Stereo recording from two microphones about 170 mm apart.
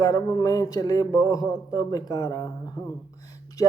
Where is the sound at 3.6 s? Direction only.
20° left (ahead or behind).